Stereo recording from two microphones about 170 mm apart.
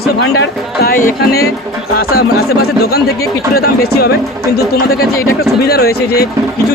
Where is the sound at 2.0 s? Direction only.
65° left (ahead or behind).